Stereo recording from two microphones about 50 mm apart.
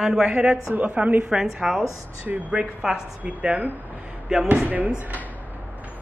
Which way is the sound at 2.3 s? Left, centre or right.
Centre.